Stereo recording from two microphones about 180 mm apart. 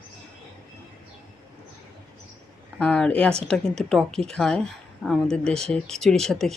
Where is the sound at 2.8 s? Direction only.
5° left (ahead or behind).